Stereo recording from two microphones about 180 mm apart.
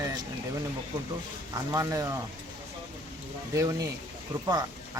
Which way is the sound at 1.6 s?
15° right (ahead or behind).